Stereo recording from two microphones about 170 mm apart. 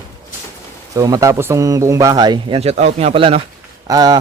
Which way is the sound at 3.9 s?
20° right (ahead or behind).